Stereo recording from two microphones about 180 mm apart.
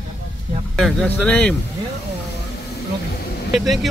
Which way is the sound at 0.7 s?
5° left (ahead or behind).